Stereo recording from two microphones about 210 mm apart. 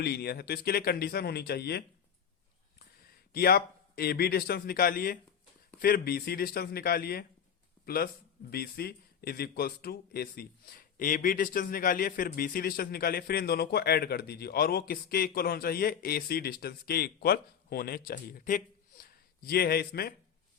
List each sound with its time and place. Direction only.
0.0 s speech: 50° left (ahead or behind)
3.3 s speech: 45° left (ahead or behind)